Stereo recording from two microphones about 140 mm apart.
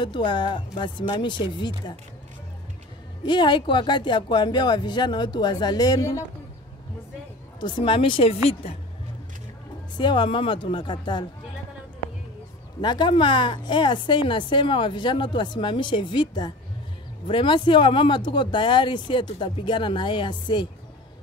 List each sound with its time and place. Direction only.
0.0 s speech: 35° left (ahead or behind)
3.3 s speech: 35° left (ahead or behind)
7.6 s speech: 35° left (ahead or behind)
9.9 s speech: 35° left (ahead or behind)
12.8 s speech: 35° left (ahead or behind)